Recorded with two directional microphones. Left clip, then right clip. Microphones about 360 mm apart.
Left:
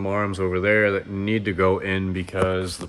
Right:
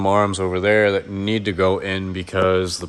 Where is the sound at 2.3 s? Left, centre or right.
Right.